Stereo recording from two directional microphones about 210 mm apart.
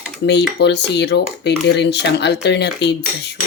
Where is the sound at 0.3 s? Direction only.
55° left (ahead or behind).